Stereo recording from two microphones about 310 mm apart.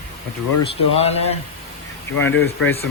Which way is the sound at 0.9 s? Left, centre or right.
Centre.